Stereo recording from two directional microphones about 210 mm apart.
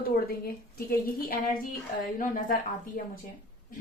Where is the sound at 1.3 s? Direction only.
40° left (ahead or behind).